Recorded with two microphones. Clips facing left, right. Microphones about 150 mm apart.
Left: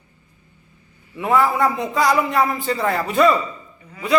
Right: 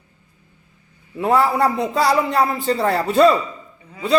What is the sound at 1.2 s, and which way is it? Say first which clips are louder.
A man's voice: right 1 dB; 35° right (ahead or behind).